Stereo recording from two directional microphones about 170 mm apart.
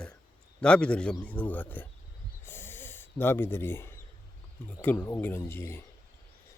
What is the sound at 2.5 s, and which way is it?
Snort, 15° left (ahead or behind).